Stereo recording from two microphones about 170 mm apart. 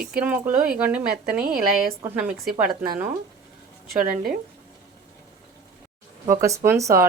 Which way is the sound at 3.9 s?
60° right (ahead or behind).